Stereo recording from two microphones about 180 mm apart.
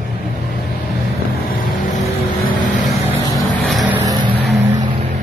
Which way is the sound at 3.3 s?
Centre (ahead or behind).